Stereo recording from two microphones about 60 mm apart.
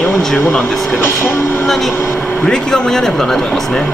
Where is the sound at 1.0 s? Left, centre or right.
Left.